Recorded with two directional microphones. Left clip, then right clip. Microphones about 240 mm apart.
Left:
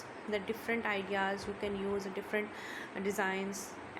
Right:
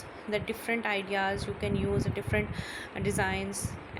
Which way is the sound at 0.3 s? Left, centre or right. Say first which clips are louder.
Right 4 dB; centre.